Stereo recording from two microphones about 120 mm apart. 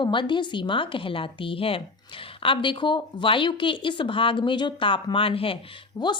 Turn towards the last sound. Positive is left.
turn(degrees=35)  # may be behind; listen again after turning